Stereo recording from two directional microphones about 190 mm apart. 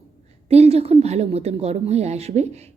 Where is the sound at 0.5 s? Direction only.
35° right (ahead or behind).